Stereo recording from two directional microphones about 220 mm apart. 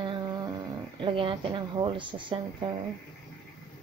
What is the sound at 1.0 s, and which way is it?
Speech, 20° right (ahead or behind).